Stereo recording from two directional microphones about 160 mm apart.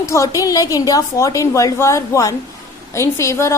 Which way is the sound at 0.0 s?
20° left (ahead or behind).